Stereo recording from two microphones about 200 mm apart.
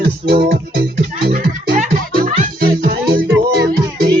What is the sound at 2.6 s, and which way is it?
Music, 50° right (ahead or behind).